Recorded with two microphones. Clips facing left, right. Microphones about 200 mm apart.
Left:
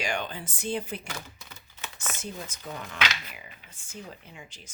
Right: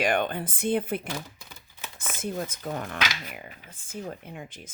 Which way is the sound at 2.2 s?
55° right (ahead or behind).